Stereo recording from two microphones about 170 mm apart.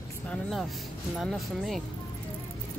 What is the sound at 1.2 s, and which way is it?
Speech, centre (ahead or behind).